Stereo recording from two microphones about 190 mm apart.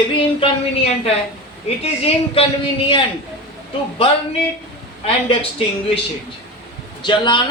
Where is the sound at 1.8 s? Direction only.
30° left (ahead or behind).